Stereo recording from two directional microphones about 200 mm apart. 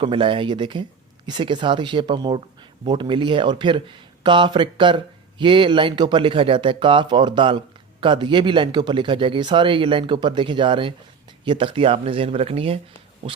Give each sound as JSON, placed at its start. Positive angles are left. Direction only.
{"t": 0.0, "sound": "speech", "side_deg": -25}